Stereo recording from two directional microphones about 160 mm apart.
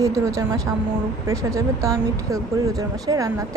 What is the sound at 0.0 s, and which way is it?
A woman's voice, 20° right (ahead or behind).